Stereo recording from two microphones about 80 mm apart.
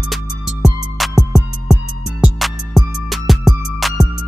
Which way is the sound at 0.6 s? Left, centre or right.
Centre.